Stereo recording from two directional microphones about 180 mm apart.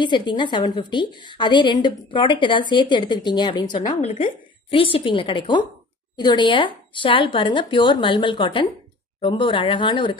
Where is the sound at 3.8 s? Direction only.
40° left (ahead or behind).